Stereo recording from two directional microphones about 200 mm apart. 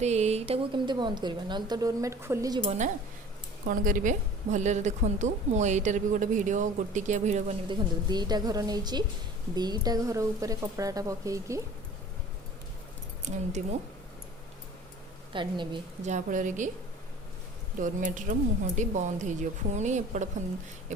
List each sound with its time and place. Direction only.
0.0 s speech: 35° right (ahead or behind); by 2.6 s 15° right (ahead or behind)
2.6 s a woman's voice: 35° right (ahead or behind)
7.7 s a woman's voice: 20° right (ahead or behind)
13.2 s a woman's voice: 35° right (ahead or behind)
15.3 s speech: 25° right (ahead or behind)
16.0 s a woman's voice: 40° right (ahead or behind)
17.7 s a woman's voice: 40° right (ahead or behind)